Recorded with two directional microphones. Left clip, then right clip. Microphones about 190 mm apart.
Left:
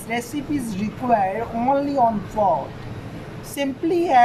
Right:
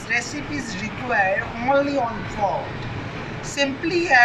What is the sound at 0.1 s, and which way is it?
Speech, 40° left (ahead or behind).